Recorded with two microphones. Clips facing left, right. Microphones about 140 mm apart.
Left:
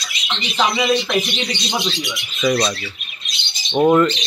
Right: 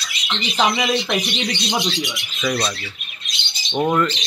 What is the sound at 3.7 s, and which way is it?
Speech, 15° left (ahead or behind).